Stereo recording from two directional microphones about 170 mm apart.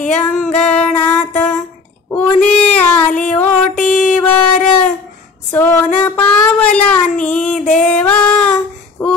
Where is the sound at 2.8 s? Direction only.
10° left (ahead or behind).